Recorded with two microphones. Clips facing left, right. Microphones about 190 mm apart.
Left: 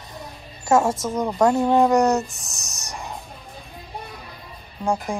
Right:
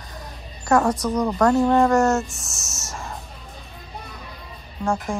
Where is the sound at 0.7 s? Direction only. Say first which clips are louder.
Even; 25° left (ahead or behind).